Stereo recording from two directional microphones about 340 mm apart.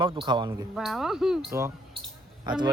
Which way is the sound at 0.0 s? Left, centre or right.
Centre.